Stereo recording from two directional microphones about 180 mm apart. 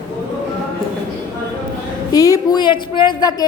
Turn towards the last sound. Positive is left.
turn(degrees=25)  # may be behind; listen again after turning